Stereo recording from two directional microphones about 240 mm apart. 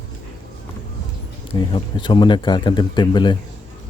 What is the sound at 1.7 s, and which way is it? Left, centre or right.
Speech, centre.